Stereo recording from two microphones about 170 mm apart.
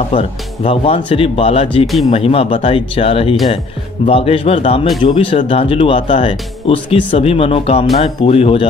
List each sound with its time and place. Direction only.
0.1 s speech: 35° left (ahead or behind)